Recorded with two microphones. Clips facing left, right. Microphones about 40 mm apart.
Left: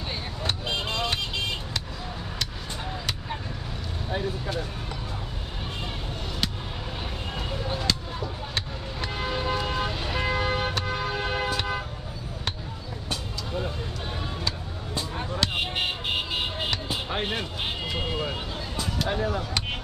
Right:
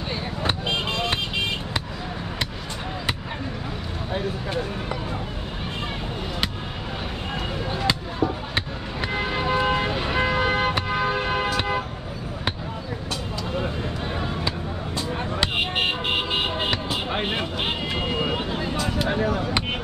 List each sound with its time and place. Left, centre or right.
0.4 s vehicle: right
8.5 s vehicle: right
15.0 s vehicle: right
16.7 s a sound: right